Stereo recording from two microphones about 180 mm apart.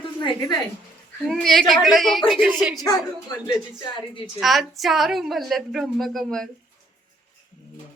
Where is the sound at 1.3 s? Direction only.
Centre (ahead or behind).